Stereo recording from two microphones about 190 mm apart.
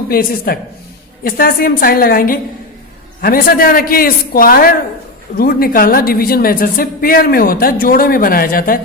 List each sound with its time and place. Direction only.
0.1 s a woman's voice: 50° left (ahead or behind)